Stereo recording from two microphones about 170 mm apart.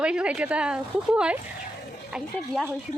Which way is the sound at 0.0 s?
5° right (ahead or behind).